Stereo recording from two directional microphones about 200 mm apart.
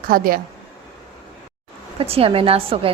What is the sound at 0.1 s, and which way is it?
Speech, 45° right (ahead or behind).